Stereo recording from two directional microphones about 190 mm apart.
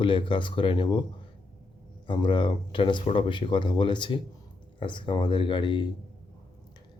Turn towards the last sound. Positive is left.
turn(degrees=25)  # may be behind; listen again after turning